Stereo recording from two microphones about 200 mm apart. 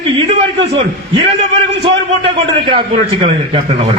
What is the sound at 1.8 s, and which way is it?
A man's voice, 25° right (ahead or behind).